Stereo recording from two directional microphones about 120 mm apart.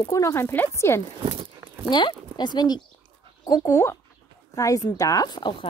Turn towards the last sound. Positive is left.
turn(degrees=40)  # may be behind; listen again after turning